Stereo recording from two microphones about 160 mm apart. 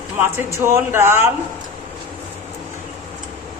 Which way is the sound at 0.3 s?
15° right (ahead or behind).